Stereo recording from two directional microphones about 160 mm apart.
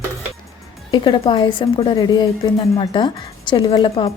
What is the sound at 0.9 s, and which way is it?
A woman's voice, 30° left (ahead or behind).